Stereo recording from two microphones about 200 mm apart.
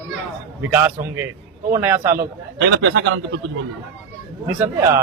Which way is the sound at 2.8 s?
70° right (ahead or behind).